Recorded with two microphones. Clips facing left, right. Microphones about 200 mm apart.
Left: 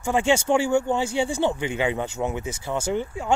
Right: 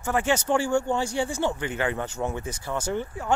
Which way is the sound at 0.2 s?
25° left (ahead or behind).